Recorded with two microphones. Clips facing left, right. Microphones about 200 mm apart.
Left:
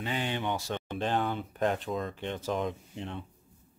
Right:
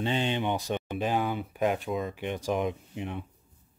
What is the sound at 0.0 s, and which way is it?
Speech, 25° right (ahead or behind).